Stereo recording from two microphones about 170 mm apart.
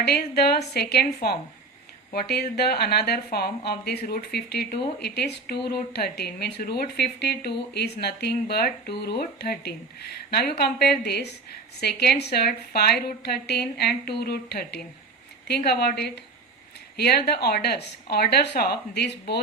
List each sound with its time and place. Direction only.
0.0 s speech: 70° left (ahead or behind)